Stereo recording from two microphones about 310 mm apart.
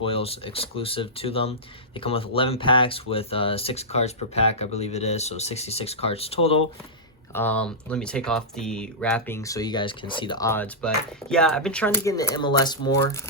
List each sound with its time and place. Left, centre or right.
0.0 s speech: centre
7.3 s speech: centre